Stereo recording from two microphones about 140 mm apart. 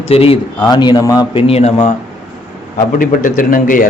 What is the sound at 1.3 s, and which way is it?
Speech, 50° left (ahead or behind).